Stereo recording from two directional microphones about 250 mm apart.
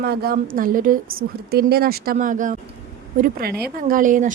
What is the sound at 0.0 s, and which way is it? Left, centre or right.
A woman's voice, right.